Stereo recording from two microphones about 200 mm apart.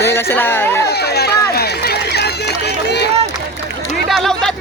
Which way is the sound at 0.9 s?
55° left (ahead or behind).